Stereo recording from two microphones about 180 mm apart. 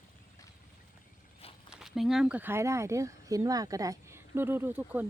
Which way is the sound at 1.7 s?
Centre (ahead or behind).